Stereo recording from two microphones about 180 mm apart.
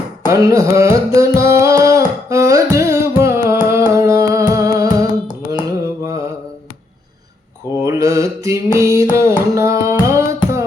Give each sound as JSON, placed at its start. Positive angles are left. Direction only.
{"t": 0.3, "sound": "carnatic music", "side_deg": -15}
{"t": 3.5, "sound": "music", "side_deg": -15}
{"t": 5.6, "sound": "carnatic music", "side_deg": -15}
{"t": 7.8, "sound": "mantra", "side_deg": -15}